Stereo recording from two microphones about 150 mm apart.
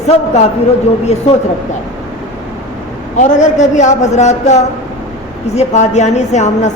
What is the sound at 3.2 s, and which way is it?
Speech, 55° left (ahead or behind).